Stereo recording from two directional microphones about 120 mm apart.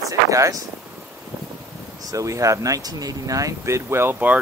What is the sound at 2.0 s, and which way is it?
Speech, 25° right (ahead or behind).